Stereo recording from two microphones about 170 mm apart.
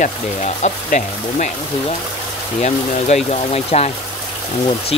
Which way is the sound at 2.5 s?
40° left (ahead or behind).